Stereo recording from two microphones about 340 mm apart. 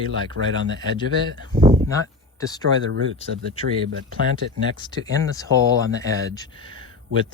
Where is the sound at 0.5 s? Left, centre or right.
Centre.